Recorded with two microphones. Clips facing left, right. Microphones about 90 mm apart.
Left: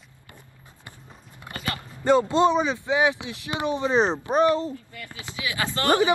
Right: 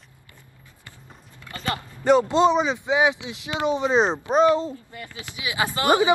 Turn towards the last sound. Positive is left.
turn(degrees=-15)  # may be behind; listen again after turning